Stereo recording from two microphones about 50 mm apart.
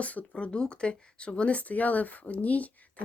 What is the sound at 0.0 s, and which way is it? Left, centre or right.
Speech, left.